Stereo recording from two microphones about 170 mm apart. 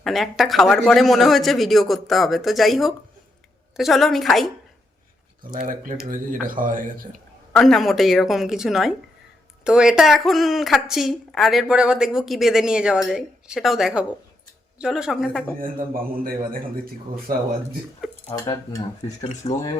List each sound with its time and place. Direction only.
0.0 s a woman's voice: centre (ahead or behind)
5.5 s speech: 50° right (ahead or behind)
7.5 s a woman's voice: centre (ahead or behind)
15.5 s a man's voice: 55° right (ahead or behind)
18.3 s speech: 25° left (ahead or behind)
19.4 s speech: 35° left (ahead or behind)